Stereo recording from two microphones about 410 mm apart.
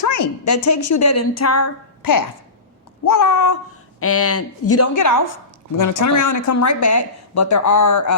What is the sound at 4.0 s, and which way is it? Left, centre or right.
A woman's voice, left.